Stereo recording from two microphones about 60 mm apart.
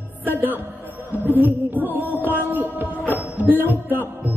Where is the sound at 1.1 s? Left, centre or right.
Right.